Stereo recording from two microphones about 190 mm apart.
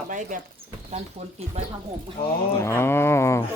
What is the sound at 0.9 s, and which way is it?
Speech, 35° right (ahead or behind).